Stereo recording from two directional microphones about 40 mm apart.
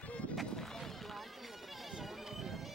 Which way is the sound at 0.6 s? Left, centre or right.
Centre.